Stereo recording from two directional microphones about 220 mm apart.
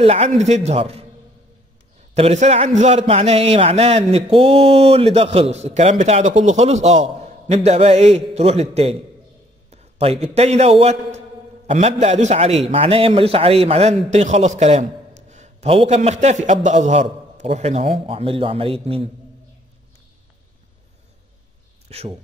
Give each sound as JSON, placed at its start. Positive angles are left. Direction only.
{"t": 0.0, "sound": "a man's voice", "side_deg": -30}
{"t": 2.1, "sound": "a man's voice", "side_deg": -30}
{"t": 21.8, "sound": "speech", "side_deg": -25}